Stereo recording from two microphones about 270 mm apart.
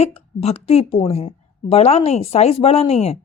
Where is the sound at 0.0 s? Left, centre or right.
Left.